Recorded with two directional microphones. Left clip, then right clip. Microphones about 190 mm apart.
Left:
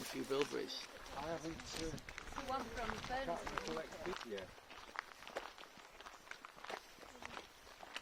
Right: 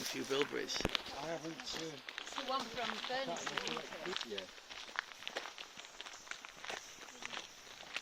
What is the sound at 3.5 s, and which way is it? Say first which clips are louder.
Speech: right 3 dB; centre (ahead or behind).